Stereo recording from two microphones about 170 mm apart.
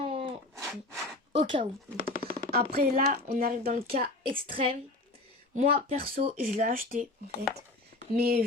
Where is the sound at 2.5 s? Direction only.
65° right (ahead or behind).